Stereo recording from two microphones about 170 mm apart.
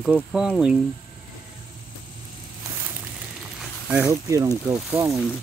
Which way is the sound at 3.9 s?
15° right (ahead or behind).